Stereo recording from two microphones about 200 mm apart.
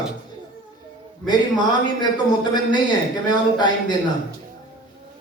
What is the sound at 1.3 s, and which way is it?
A man's voice, 20° left (ahead or behind).